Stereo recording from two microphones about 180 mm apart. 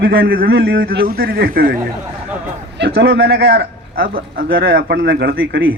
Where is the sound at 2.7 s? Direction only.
70° right (ahead or behind).